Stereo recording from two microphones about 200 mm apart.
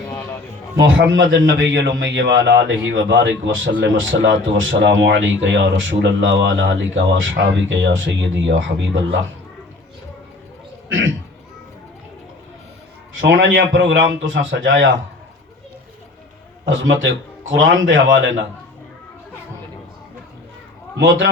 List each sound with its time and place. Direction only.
0.8 s a man's voice: 65° right (ahead or behind)
13.1 s a man's voice: 70° right (ahead or behind)
16.6 s a man's voice: 70° right (ahead or behind)